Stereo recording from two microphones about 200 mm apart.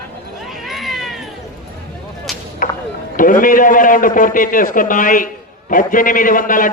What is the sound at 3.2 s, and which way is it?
A man's voice, 40° left (ahead or behind).